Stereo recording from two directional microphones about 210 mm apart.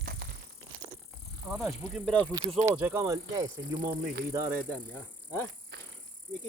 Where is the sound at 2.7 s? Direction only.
10° right (ahead or behind).